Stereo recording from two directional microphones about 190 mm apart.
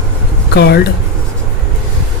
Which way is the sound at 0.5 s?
60° left (ahead or behind).